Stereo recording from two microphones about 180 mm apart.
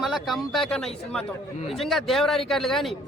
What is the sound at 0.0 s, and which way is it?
A man's voice, centre (ahead or behind).